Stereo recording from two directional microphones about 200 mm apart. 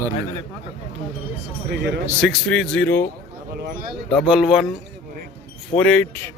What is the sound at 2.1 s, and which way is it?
A man's voice, 5° right (ahead or behind).